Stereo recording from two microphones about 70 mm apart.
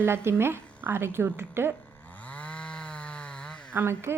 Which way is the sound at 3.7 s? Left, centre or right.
Right.